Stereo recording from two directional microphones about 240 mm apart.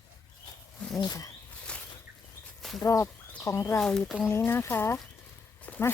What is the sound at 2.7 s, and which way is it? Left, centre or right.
Speech, centre.